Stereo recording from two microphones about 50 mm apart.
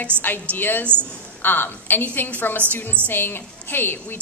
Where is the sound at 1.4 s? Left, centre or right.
Left.